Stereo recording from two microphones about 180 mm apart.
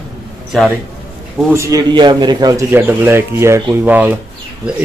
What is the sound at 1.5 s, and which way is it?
A man's voice, 15° right (ahead or behind).